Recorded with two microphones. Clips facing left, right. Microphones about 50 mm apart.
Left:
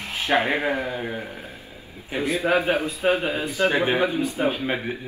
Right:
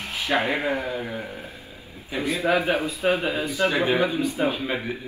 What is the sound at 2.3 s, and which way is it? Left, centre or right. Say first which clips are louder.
Speech: left 1 dB; centre.